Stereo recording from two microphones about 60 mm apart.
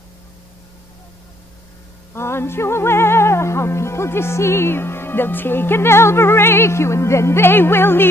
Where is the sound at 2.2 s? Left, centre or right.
Left.